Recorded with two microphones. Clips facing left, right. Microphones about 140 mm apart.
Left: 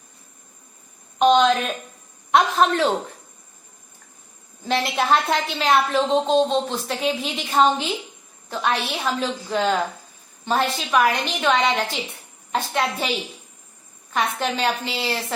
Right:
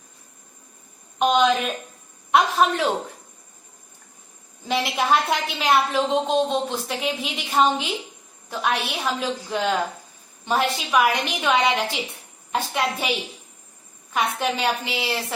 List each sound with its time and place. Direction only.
1.2 s a sound: 5° right (ahead or behind)
2.3 s a man's voice: 5° right (ahead or behind)
4.7 s a man's voice: 5° right (ahead or behind)